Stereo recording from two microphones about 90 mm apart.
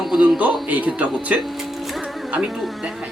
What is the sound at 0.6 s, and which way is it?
Speech, 15° right (ahead or behind).